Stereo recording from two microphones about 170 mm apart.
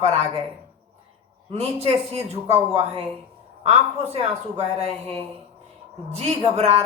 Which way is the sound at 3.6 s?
35° right (ahead or behind).